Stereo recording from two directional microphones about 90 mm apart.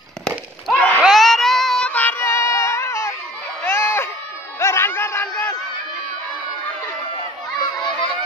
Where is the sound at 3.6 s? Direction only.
30° left (ahead or behind).